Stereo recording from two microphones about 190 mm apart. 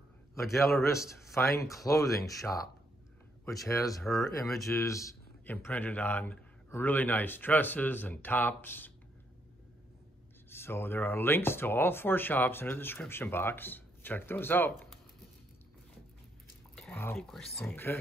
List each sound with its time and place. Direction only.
0.3 s a man's voice: centre (ahead or behind)
0.9 s a man's voice: 15° left (ahead or behind)
4.0 s speech: centre (ahead or behind)
4.6 s a man's voice: 15° left (ahead or behind)
10.5 s a man's voice: 10° left (ahead or behind)
16.9 s a man's voice: 10° left (ahead or behind)